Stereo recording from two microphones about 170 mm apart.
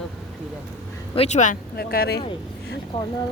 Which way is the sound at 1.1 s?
40° left (ahead or behind).